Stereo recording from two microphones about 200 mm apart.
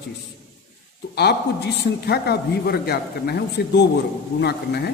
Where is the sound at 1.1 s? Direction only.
55° left (ahead or behind).